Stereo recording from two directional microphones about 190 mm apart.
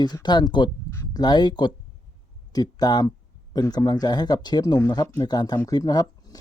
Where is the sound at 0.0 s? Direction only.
20° left (ahead or behind).